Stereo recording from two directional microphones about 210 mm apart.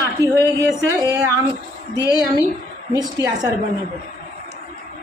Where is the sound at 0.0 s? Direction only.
15° right (ahead or behind).